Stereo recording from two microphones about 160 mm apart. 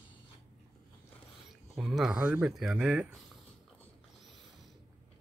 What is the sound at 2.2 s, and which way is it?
Speech, 5° right (ahead or behind).